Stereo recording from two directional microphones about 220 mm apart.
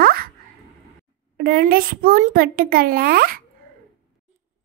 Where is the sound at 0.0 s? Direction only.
40° right (ahead or behind).